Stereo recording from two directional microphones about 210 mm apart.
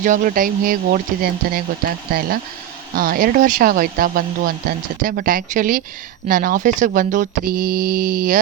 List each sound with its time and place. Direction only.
0.0 s speech: 40° right (ahead or behind)